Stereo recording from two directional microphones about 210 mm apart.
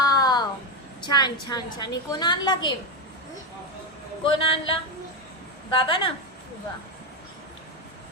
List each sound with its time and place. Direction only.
0.0 s a sound: 20° left (ahead or behind)
1.0 s a woman's voice: 20° left (ahead or behind)
4.2 s a woman's voice: 25° left (ahead or behind)
5.7 s a woman's voice: 25° left (ahead or behind)